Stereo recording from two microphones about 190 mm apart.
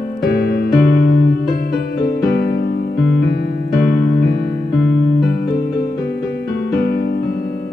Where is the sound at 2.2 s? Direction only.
55° left (ahead or behind).